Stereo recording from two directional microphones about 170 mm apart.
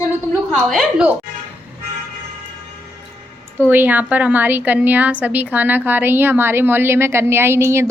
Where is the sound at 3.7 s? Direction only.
10° right (ahead or behind).